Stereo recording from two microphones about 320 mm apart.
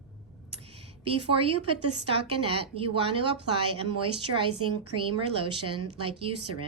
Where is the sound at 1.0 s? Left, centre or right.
Centre.